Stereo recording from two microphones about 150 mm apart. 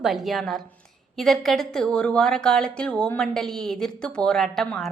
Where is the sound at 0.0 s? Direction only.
Centre (ahead or behind).